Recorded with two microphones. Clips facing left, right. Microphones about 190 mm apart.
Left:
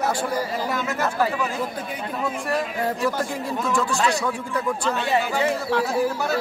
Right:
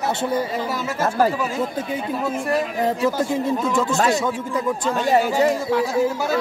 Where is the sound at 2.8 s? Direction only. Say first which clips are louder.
Right 4 dB; 20° right (ahead or behind).